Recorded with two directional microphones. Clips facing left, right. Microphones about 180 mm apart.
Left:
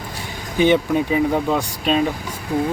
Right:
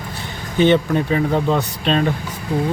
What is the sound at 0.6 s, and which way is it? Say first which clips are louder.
Speech: right 1 dB; 10° left (ahead or behind).